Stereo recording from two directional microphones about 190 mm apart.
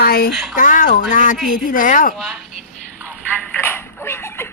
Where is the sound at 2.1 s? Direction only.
Centre (ahead or behind).